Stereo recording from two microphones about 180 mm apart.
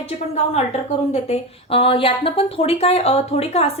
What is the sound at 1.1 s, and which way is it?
A woman's voice, 35° left (ahead or behind).